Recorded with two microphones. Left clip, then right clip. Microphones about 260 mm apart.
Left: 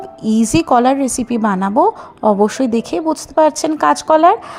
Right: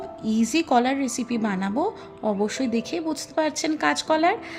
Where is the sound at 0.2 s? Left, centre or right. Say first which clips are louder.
Left 9 dB; centre.